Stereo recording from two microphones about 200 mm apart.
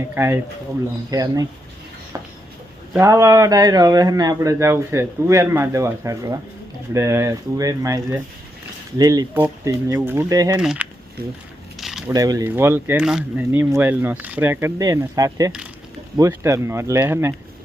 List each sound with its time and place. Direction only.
0.1 s speech: 10° right (ahead or behind)
2.1 s a sound: 15° right (ahead or behind)
2.9 s speech: 15° right (ahead or behind)
10.6 s speech: 5° right (ahead or behind)
11.8 s a sound: centre (ahead or behind)
12.1 s speech: 20° right (ahead or behind)